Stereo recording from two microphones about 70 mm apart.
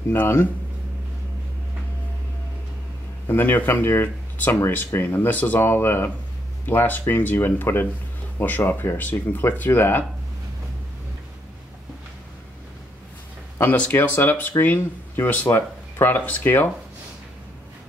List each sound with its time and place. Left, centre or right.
0.1 s speech: left
3.3 s speech: left
13.8 s speech: left